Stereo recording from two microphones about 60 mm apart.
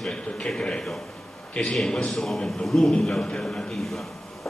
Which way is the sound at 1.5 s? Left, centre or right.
Centre.